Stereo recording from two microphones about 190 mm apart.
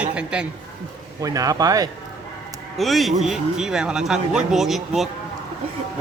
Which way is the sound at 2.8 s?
Centre (ahead or behind).